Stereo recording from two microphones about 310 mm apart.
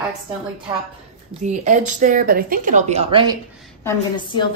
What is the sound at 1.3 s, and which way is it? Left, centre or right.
Speech, right.